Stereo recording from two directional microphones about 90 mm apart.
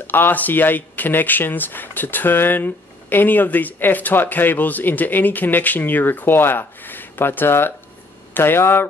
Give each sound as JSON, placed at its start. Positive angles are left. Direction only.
{"t": 0.0, "sound": "speech", "side_deg": 20}